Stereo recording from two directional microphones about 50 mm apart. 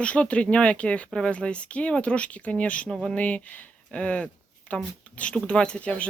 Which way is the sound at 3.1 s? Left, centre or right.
Left.